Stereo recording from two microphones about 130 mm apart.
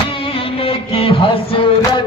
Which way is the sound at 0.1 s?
40° left (ahead or behind).